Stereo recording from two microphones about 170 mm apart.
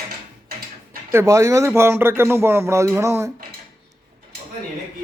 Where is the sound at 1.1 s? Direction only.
15° right (ahead or behind).